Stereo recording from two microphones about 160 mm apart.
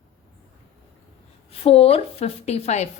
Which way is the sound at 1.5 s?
40° left (ahead or behind).